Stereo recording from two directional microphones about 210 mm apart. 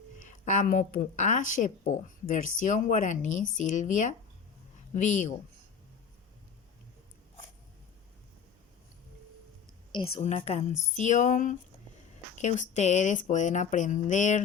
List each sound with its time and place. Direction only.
0.2 s speech: 40° left (ahead or behind)
10.2 s speech: 30° left (ahead or behind)